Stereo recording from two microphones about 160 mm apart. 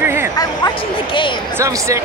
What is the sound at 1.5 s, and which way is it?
Speech, 20° right (ahead or behind).